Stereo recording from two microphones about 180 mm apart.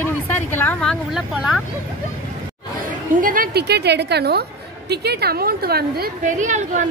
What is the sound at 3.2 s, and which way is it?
A woman's voice, 50° right (ahead or behind).